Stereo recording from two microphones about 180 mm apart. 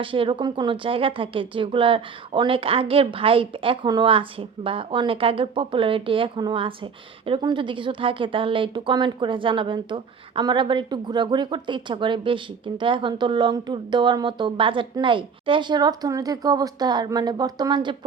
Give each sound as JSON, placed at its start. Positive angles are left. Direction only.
{"t": 0.0, "sound": "speech", "side_deg": -30}